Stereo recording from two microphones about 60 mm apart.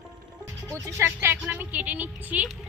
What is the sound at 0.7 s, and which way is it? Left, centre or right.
Speech, right.